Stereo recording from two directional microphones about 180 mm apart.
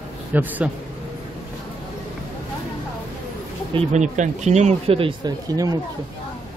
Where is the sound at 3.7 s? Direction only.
40° right (ahead or behind); by 5.8 s 20° right (ahead or behind).